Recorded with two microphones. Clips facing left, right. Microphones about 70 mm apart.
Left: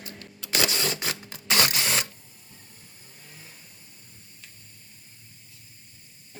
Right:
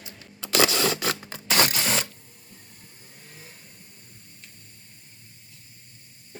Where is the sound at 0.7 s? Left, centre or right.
Right.